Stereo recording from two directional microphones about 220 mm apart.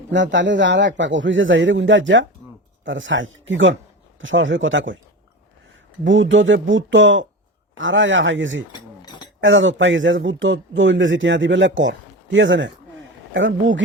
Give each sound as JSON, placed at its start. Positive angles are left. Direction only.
{"t": 0.1, "sound": "speech", "side_deg": -55}
{"t": 9.0, "sound": "a sound", "side_deg": 20}
{"t": 9.4, "sound": "speech", "side_deg": -60}